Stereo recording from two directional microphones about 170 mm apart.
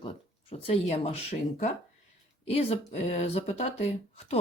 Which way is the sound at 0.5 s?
40° left (ahead or behind).